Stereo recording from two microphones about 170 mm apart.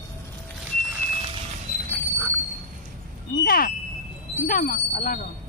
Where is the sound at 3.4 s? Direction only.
60° left (ahead or behind).